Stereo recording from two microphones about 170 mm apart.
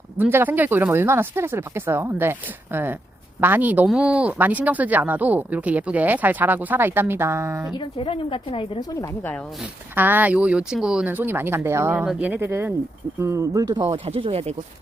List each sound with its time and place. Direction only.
0.2 s speech: 10° right (ahead or behind)
3.4 s speech: 10° right (ahead or behind)
7.8 s a woman's voice: 30° left (ahead or behind)
9.0 s speech: 10° left (ahead or behind)
9.9 s speech: 10° right (ahead or behind); by 14.5 s 35° right (ahead or behind)